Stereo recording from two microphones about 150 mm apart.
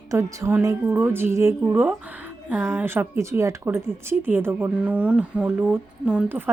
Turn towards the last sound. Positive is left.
turn(degrees=-10)  # may be behind; listen again after turning